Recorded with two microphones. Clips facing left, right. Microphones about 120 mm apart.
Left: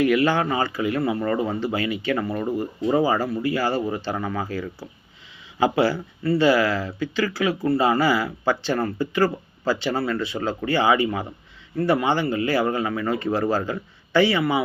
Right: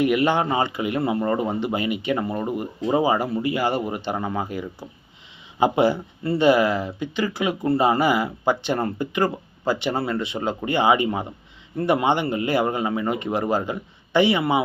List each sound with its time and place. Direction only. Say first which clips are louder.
0.0 s speech: even; 20° right (ahead or behind)